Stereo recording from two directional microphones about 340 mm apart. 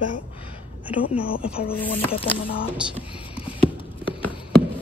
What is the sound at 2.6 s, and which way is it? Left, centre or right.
Speech, centre.